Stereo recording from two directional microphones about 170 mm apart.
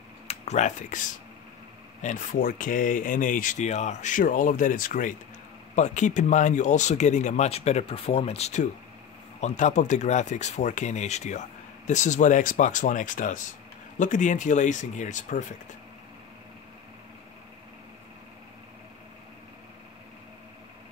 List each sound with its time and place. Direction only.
0.3 s speech: 40° left (ahead or behind)